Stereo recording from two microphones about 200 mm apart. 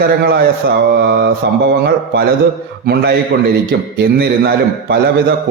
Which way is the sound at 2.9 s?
50° right (ahead or behind).